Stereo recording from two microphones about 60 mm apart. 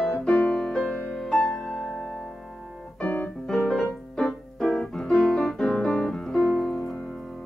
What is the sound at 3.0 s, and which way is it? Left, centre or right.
Keyboard, left.